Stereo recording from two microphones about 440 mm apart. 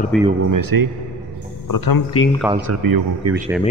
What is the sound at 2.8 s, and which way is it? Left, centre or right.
Speech, right.